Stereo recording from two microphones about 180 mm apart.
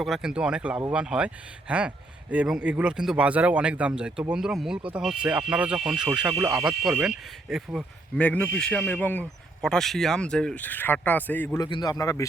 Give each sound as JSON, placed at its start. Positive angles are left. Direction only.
{"t": 0.0, "sound": "speech", "side_deg": -5}
{"t": 7.5, "sound": "speech", "side_deg": 0}